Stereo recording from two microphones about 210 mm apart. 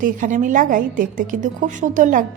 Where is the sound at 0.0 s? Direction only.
35° right (ahead or behind).